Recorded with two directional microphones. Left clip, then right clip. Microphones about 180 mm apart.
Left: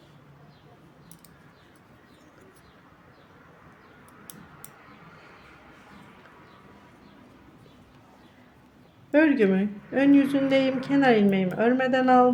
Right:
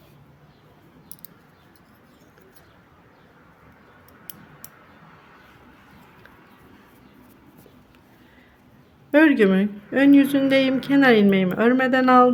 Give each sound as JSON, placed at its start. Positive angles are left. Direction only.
{"t": 9.1, "sound": "speech", "side_deg": -30}